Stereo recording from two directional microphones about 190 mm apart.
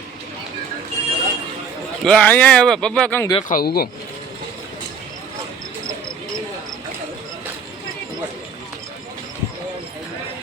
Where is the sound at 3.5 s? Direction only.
50° left (ahead or behind).